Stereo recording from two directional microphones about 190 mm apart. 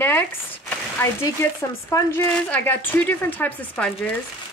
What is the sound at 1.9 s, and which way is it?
Speech, 10° left (ahead or behind).